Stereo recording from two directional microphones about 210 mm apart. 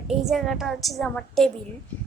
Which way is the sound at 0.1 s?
Centre (ahead or behind).